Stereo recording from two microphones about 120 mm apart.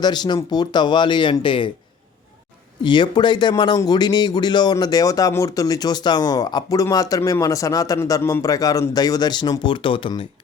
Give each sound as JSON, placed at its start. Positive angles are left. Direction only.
{"t": 0.0, "sound": "speech", "side_deg": 35}
{"t": 2.8, "sound": "speech", "side_deg": 40}